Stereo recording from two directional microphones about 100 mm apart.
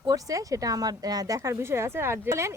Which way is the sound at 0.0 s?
35° right (ahead or behind).